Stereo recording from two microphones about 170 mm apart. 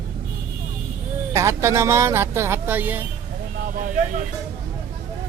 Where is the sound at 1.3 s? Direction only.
15° right (ahead or behind).